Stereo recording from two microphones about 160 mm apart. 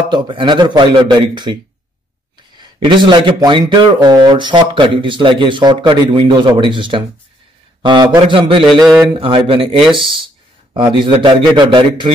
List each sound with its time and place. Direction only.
0.1 s speech: 30° right (ahead or behind)
2.8 s speech: 30° right (ahead or behind)
8.6 s speech: centre (ahead or behind)
9.2 s speech: 35° right (ahead or behind)